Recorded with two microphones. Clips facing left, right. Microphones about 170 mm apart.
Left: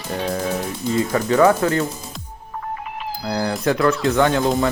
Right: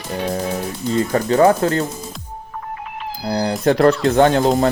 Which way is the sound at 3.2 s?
30° right (ahead or behind).